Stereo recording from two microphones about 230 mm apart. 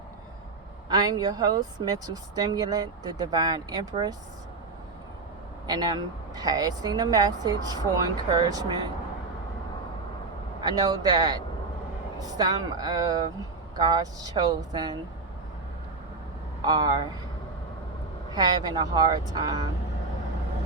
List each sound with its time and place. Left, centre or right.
0.9 s speech: centre
5.6 s speech: centre
10.6 s speech: centre
16.6 s speech: centre
18.3 s speech: centre